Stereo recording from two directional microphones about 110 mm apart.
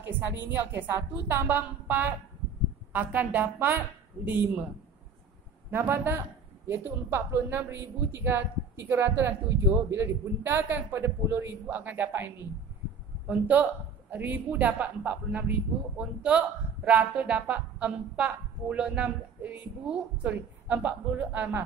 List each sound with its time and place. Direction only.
0.0 s speech: 20° right (ahead or behind)
5.7 s speech: 20° right (ahead or behind)